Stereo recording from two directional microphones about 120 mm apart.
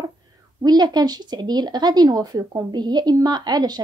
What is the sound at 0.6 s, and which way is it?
A woman's voice, 35° right (ahead or behind).